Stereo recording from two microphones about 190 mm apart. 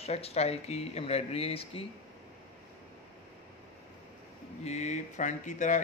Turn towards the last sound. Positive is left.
turn(degrees=40)  # may be behind; listen again after turning